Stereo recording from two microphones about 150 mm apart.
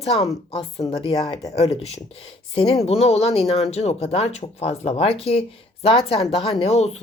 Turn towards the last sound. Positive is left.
turn(degrees=45)  # may be behind; listen again after turning